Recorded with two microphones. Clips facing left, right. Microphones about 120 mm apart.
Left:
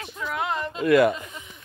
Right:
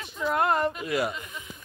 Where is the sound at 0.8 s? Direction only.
60° left (ahead or behind).